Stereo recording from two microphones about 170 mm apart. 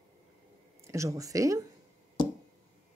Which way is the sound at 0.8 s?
15° right (ahead or behind).